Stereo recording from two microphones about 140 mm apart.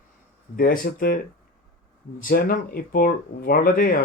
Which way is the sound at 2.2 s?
90° left.